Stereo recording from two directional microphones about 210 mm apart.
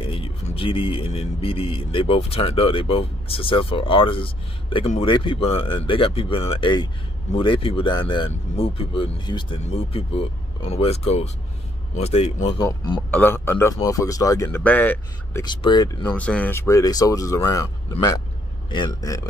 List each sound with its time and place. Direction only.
0.0 s speech: 25° left (ahead or behind)
13.1 s a man's voice: 10° left (ahead or behind)
15.4 s speech: 20° left (ahead or behind)
16.2 s a man's voice: 5° left (ahead or behind)